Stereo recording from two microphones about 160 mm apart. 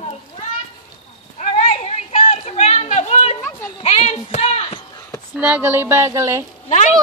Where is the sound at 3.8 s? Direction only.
40° left (ahead or behind).